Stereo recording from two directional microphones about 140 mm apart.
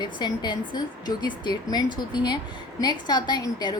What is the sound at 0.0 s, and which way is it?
A woman's voice, 35° left (ahead or behind).